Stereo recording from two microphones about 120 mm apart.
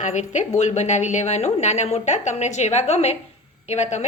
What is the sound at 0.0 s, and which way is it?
A woman's voice, 80° left.